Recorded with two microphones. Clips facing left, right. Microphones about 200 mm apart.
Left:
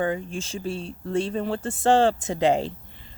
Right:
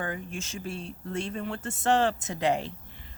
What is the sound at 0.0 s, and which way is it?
Speech, 30° left (ahead or behind).